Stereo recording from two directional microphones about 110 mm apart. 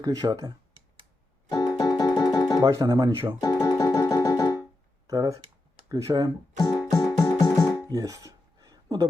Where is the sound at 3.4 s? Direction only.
35° left (ahead or behind).